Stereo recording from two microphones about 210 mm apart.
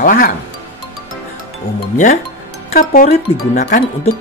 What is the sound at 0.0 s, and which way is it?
Speech, 40° left (ahead or behind).